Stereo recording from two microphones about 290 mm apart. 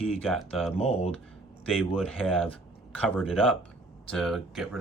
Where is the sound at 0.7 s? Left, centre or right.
Left.